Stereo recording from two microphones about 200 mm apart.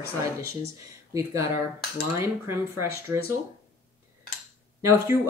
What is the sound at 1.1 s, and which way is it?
Speech, 10° right (ahead or behind).